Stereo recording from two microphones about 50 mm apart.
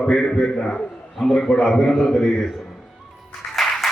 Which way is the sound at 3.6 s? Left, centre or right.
Centre.